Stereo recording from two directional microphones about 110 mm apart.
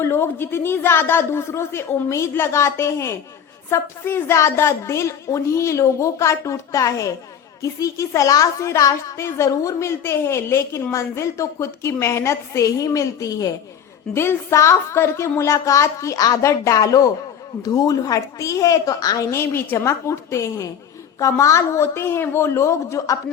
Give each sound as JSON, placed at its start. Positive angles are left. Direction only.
{"t": 0.0, "sound": "a woman's voice", "side_deg": 20}
{"t": 14.1, "sound": "a woman's voice", "side_deg": 20}
{"t": 19.4, "sound": "a woman's voice", "side_deg": 25}